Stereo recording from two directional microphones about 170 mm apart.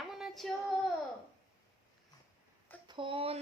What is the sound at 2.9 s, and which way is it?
Speech, 30° right (ahead or behind).